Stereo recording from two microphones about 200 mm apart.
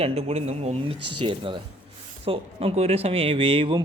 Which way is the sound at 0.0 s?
30° right (ahead or behind).